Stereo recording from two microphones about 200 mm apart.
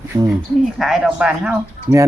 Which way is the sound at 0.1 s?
20° right (ahead or behind).